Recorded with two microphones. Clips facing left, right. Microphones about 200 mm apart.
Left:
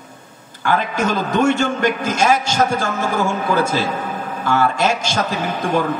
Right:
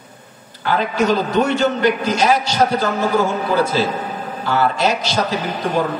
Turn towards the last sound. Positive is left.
turn(degrees=50)  # may be behind; listen again after turning